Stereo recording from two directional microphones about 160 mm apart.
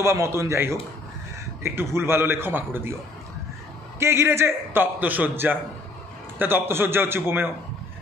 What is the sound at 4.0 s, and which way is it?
A man's voice, 15° right (ahead or behind).